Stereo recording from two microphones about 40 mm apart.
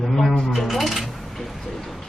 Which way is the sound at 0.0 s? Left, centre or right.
Centre.